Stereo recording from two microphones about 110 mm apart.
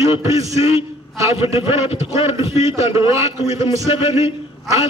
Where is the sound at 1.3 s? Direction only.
65° left (ahead or behind).